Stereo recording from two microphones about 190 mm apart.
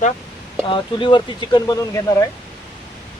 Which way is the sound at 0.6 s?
25° left (ahead or behind).